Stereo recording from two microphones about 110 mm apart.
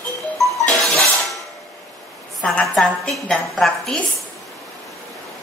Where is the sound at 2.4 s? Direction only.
10° left (ahead or behind).